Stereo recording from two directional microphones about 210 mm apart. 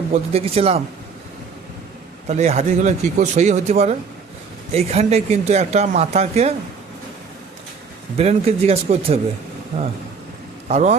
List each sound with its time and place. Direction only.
0.1 s speech: 30° right (ahead or behind)
2.2 s speech: 30° right (ahead or behind)
8.1 s speech: 30° right (ahead or behind)
10.7 s speech: 35° right (ahead or behind)